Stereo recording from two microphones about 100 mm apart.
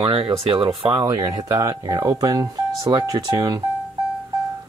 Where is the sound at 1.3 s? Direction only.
40° right (ahead or behind).